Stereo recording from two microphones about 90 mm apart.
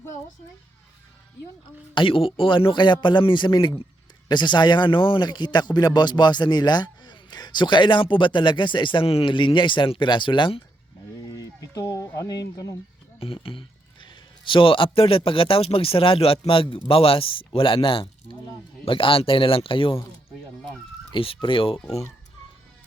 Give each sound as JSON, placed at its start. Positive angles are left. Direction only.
{"t": 2.0, "sound": "speech", "side_deg": 75}
{"t": 11.3, "sound": "speech", "side_deg": 40}
{"t": 13.1, "sound": "a man's voice", "side_deg": 90}
{"t": 16.5, "sound": "speech", "side_deg": 75}
{"t": 21.1, "sound": "speech", "side_deg": 75}